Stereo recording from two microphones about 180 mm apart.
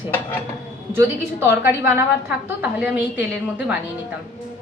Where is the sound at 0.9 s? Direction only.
15° right (ahead or behind).